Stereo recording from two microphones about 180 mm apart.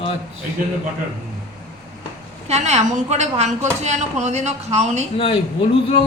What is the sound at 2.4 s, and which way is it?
A woman's voice, 40° right (ahead or behind).